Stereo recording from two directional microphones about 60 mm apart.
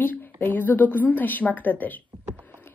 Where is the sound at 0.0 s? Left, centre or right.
Left.